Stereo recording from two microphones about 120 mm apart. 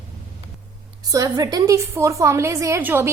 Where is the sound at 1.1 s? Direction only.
30° right (ahead or behind).